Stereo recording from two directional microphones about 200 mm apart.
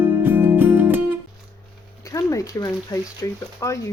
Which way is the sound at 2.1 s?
15° left (ahead or behind).